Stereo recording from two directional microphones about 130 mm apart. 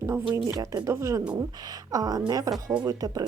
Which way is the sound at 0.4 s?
25° right (ahead or behind).